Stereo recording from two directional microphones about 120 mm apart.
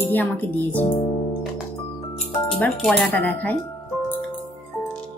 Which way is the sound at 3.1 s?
15° left (ahead or behind).